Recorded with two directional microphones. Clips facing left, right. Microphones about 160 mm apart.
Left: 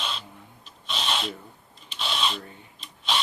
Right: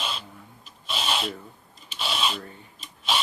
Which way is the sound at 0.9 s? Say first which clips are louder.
Right 1 dB; 5° right (ahead or behind).